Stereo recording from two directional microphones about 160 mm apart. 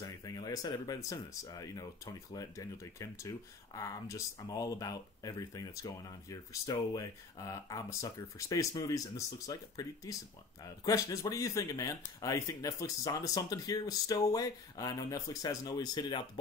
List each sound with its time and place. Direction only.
0.0 s speech: 25° left (ahead or behind)